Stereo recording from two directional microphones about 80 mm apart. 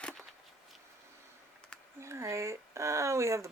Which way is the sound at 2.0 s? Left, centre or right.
Right.